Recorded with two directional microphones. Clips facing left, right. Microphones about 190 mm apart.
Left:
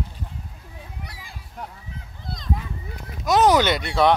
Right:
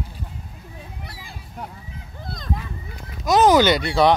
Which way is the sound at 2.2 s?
50° right (ahead or behind).